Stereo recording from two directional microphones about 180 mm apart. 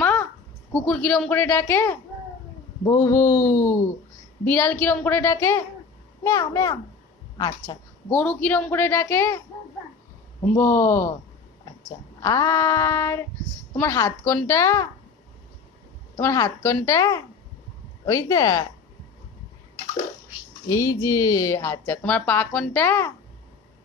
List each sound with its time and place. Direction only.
0.0 s a sound: 10° left (ahead or behind)
0.8 s speech: 10° left (ahead or behind); by 7.7 s 30° left (ahead or behind)
8.1 s speech: 10° left (ahead or behind)
10.6 s speech: 15° left (ahead or behind)
12.2 s speech: 15° left (ahead or behind)
16.2 s speech: 15° left (ahead or behind)
20.6 s speech: 15° left (ahead or behind)